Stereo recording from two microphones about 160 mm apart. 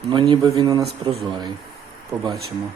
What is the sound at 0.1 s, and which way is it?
Speech, 30° right (ahead or behind).